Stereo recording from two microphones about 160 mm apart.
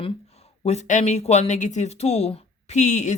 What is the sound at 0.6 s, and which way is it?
Speech, 45° left (ahead or behind).